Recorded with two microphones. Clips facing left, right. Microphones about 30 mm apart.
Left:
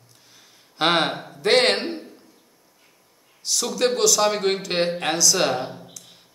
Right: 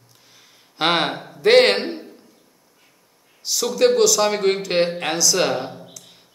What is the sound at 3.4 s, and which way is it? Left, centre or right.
A man's voice, centre.